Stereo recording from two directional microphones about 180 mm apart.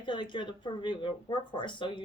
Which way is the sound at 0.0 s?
25° left (ahead or behind).